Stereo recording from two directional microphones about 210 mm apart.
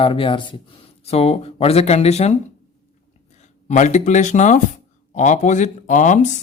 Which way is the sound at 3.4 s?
35° left (ahead or behind).